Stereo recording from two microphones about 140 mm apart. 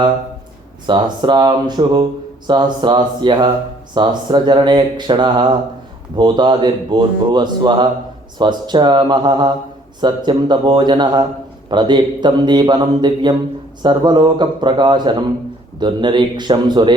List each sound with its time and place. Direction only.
0.9 s speech: 35° right (ahead or behind)